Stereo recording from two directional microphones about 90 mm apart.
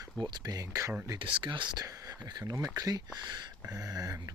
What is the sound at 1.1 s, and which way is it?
Speech, 65° right (ahead or behind).